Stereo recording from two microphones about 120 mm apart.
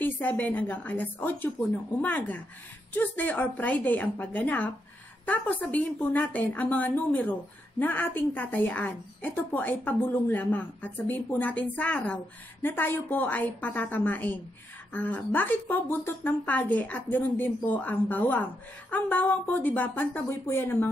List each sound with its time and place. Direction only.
0.0 s a woman's voice: 15° left (ahead or behind)